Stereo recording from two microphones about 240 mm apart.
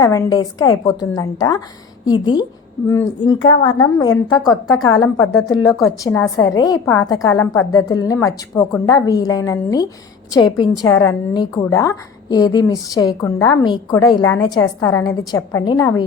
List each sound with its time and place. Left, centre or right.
0.0 s a woman's voice: centre